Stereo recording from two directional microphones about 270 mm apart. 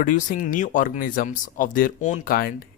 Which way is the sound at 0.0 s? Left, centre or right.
Left.